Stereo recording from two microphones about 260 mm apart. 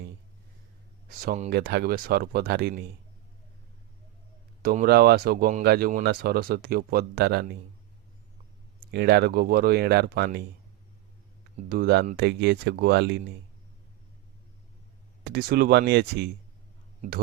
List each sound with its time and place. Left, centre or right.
1.2 s speech: right
4.6 s speech: right
8.8 s speech: right
11.7 s speech: right
15.2 s speech: right